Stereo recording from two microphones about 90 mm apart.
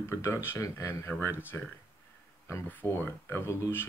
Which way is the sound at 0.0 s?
30° left (ahead or behind).